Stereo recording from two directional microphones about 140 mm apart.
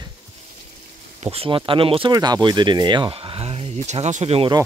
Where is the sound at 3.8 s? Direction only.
55° right (ahead or behind).